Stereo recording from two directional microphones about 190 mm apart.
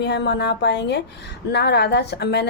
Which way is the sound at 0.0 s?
65° left (ahead or behind).